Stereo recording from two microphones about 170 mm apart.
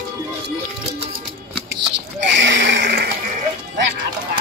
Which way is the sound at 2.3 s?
90° right.